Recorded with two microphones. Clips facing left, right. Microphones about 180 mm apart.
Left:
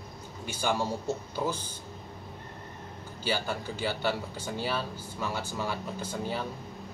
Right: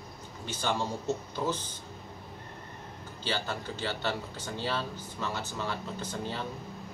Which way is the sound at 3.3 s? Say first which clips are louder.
Left 2 dB; 10° left (ahead or behind).